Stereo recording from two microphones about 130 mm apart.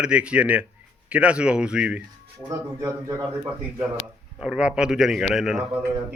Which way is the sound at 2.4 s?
25° right (ahead or behind).